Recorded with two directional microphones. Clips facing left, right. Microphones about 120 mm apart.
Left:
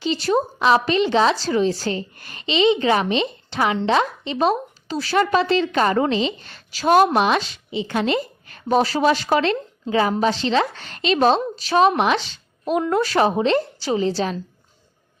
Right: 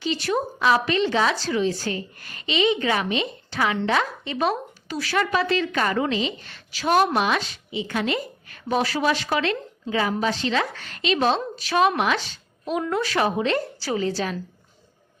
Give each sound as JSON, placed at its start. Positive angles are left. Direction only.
{"t": 0.0, "sound": "a woman's voice", "side_deg": 30}
{"t": 12.9, "sound": "a woman's voice", "side_deg": 35}